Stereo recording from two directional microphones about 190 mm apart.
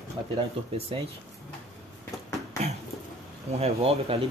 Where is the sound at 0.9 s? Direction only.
30° right (ahead or behind).